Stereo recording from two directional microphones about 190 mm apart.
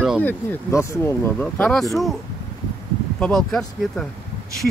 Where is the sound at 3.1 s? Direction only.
5° left (ahead or behind).